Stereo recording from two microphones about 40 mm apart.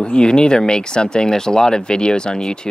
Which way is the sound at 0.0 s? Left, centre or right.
Left.